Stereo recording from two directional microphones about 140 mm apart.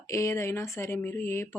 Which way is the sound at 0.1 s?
20° left (ahead or behind).